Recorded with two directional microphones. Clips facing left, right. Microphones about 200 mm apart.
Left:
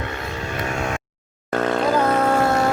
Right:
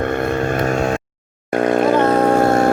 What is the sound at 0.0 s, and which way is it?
Vehicle, 55° right (ahead or behind).